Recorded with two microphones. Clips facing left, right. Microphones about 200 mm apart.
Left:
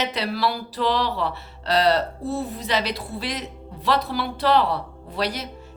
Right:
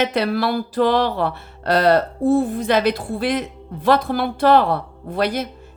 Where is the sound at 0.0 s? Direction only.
55° right (ahead or behind).